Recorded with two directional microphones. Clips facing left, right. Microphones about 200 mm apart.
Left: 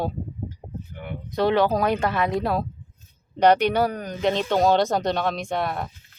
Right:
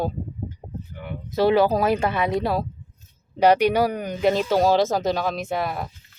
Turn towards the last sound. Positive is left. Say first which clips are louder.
# even
turn(degrees=0)  # may be behind; listen again after turning